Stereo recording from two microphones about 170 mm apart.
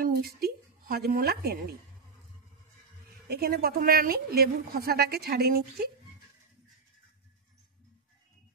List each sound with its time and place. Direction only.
0.0 s speech: 60° right (ahead or behind)
3.3 s a woman's voice: 65° right (ahead or behind)